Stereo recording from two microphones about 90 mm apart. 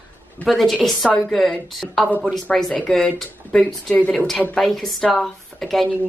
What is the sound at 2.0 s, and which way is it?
A woman's voice, 15° left (ahead or behind).